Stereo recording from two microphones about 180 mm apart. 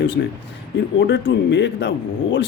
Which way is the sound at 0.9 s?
85° left.